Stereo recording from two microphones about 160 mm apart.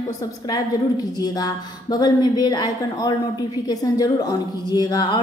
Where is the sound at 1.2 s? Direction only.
25° left (ahead or behind).